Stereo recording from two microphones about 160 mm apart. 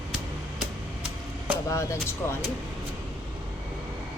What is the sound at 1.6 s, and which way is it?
Speech, 20° left (ahead or behind).